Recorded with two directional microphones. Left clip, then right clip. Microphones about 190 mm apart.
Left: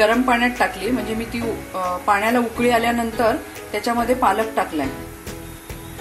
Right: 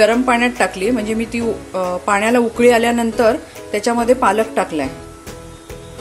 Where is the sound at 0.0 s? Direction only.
40° right (ahead or behind).